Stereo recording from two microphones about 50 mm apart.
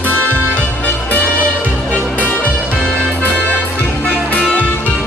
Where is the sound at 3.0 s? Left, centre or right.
Left.